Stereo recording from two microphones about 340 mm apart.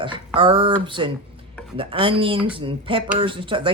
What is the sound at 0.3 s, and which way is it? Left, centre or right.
Speech, centre.